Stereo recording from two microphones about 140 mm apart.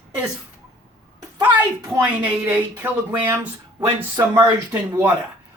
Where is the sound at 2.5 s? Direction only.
15° right (ahead or behind).